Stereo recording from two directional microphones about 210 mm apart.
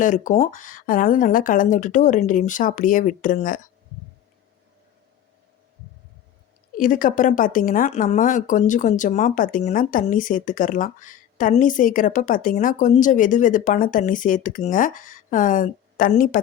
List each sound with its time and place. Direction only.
0.0 s speech: 35° left (ahead or behind)
6.7 s speech: 40° left (ahead or behind)